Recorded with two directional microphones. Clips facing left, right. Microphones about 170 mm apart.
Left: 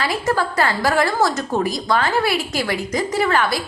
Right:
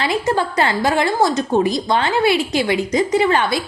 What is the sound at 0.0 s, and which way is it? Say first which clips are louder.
A woman's voice: right 2 dB; 20° right (ahead or behind).